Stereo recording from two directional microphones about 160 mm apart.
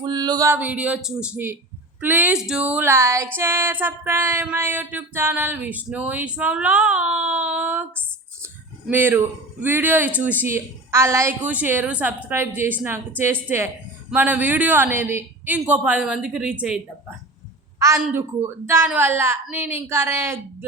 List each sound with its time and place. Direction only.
0.0 s a man's voice: 25° right (ahead or behind)
8.9 s a man's voice: 15° right (ahead or behind)
17.7 s a woman's voice: 20° right (ahead or behind)